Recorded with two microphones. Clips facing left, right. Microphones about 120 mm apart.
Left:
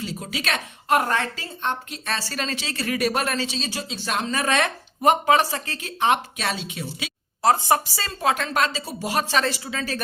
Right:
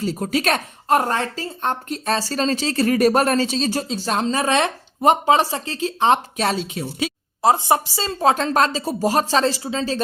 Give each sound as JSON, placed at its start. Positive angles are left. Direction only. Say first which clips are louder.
{"t": 0.0, "sound": "a woman's voice", "louder": "right 8 dB", "side_deg": -45}
{"t": 7.4, "sound": "a woman's voice", "louder": "right 2 dB", "side_deg": -20}